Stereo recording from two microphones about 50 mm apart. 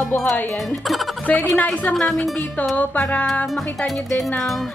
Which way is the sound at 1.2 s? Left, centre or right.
Left.